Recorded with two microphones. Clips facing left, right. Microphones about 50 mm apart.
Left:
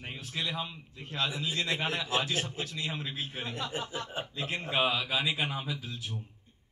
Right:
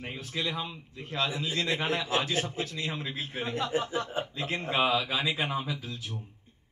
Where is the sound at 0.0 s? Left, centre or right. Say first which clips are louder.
Right 3 dB; right.